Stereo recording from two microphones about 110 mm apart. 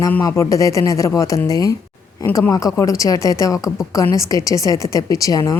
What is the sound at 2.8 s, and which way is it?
Speech, 30° left (ahead or behind).